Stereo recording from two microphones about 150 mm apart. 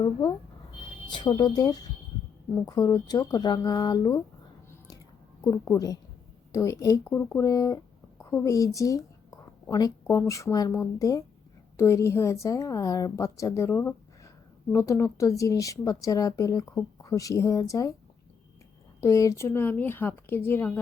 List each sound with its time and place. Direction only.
0.0 s a woman's voice: 25° left (ahead or behind)
5.4 s a woman's voice: 25° left (ahead or behind)
18.9 s a woman's voice: 20° left (ahead or behind)